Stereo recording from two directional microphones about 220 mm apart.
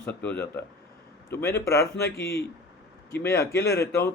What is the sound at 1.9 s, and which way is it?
Speech, 50° left (ahead or behind).